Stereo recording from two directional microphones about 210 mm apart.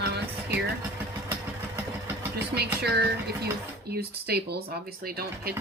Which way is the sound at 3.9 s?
50° right (ahead or behind).